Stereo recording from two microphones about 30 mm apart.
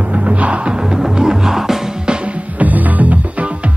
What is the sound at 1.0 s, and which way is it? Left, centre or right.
Music, centre.